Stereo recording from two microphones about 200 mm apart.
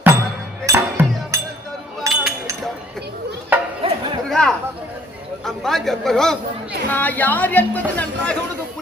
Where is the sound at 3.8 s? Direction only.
30° right (ahead or behind).